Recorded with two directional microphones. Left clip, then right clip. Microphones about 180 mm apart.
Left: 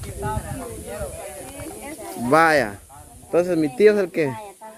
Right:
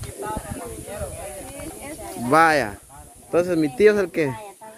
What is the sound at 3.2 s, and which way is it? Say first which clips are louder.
Speech: left 1 dB; 10° right (ahead or behind).